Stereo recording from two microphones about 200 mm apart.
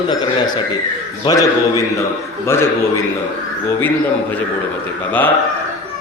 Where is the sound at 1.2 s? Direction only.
15° left (ahead or behind).